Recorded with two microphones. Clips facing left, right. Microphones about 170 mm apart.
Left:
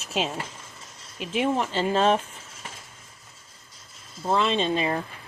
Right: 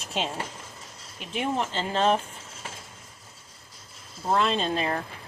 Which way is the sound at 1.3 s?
10° left (ahead or behind).